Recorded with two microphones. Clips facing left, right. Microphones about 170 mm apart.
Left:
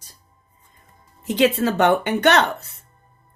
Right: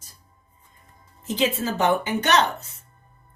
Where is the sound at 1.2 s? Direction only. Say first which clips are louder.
Left 6 dB; 65° left (ahead or behind).